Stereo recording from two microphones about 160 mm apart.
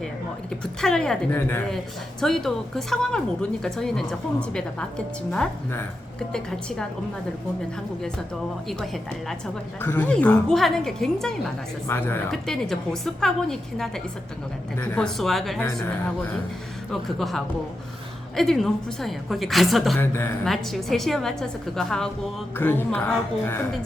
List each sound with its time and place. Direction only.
0.6 s a woman's voice: 5° left (ahead or behind)
2.2 s a woman's voice: centre (ahead or behind)
8.6 s a woman's voice: centre (ahead or behind)
9.8 s a woman's voice: 15° left (ahead or behind)
11.9 s a woman's voice: 15° left (ahead or behind)
12.3 s a woman's voice: centre (ahead or behind)
15.6 s a woman's voice: 15° left (ahead or behind)
16.9 s a woman's voice: centre (ahead or behind)
20.0 s a woman's voice: 15° left (ahead or behind)
20.4 s a woman's voice: centre (ahead or behind)